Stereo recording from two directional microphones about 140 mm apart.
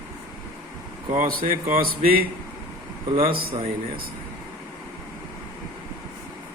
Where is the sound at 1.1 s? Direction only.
80° right.